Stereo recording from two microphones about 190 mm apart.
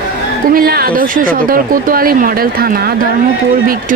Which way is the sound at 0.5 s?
50° right (ahead or behind).